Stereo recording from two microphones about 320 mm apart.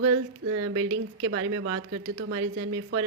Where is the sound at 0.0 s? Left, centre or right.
Right.